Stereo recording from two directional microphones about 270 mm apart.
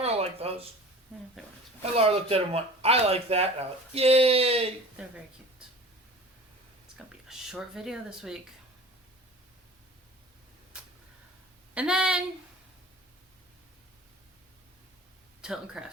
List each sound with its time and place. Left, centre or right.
0.0 s a sound: right
1.8 s speech: right
4.9 s speech: centre
6.9 s speech: centre
11.7 s speech: centre
15.4 s speech: centre